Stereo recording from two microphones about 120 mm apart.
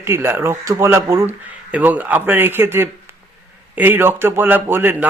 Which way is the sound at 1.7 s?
15° right (ahead or behind).